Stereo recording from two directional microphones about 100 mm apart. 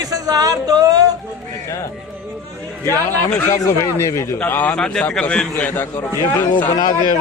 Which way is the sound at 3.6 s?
30° left (ahead or behind).